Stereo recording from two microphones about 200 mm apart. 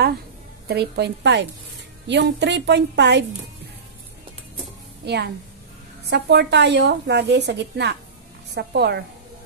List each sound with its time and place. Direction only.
0.7 s a woman's voice: 55° right (ahead or behind)
5.0 s a woman's voice: 55° right (ahead or behind)